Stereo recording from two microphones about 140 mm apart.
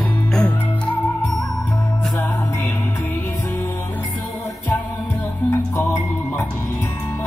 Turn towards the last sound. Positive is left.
turn(degrees=15)  # may be behind; listen again after turning